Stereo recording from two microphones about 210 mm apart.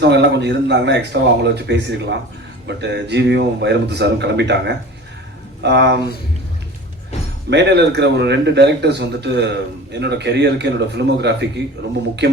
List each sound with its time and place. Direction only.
0.0 s a man's voice: 55° right (ahead or behind)
7.5 s a man's voice: 55° right (ahead or behind)